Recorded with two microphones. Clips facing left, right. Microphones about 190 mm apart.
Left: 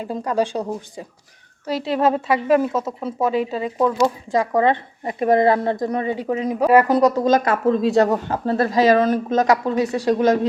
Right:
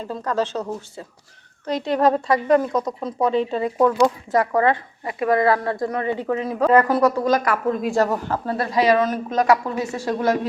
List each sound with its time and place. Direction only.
0.0 s a woman's voice: 10° left (ahead or behind)
4.3 s speech: 15° left (ahead or behind); by 8.2 s 30° left (ahead or behind)
8.5 s speech: 45° left (ahead or behind)
9.0 s speech: 25° left (ahead or behind)